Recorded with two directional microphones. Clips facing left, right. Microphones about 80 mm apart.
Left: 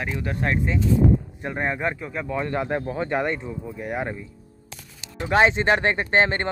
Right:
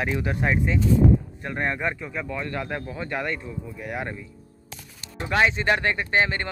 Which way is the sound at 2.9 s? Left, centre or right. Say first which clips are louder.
Left 5 dB; left.